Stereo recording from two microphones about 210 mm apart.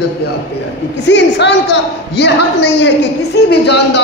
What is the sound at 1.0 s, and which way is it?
A woman's voice, 55° left (ahead or behind).